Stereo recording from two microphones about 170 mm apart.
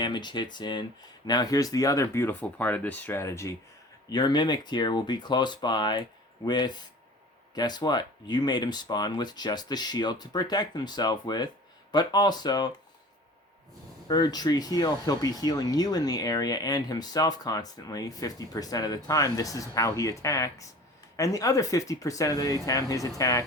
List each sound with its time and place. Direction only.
0.0 s speech: 25° left (ahead or behind)
14.1 s speech: 25° left (ahead or behind)